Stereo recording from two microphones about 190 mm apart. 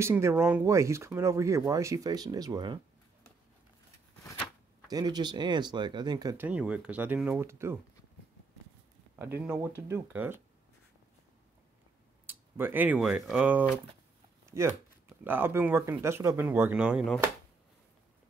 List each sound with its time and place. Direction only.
0.0 s speech: 10° right (ahead or behind)
4.8 s speech: 20° right (ahead or behind)
6.4 s speech: 5° right (ahead or behind)
9.2 s speech: 10° right (ahead or behind)
12.3 s speech: 10° right (ahead or behind)